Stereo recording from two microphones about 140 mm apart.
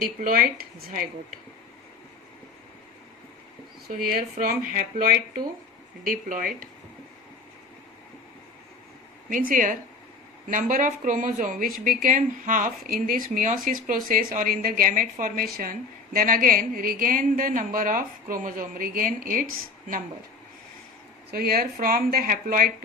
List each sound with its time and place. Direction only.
0.0 s speech: 90° right
3.8 s speech: 90° right
6.1 s a woman's voice: 75° right (ahead or behind)
9.5 s a woman's voice: 70° right (ahead or behind)
21.3 s speech: 90° right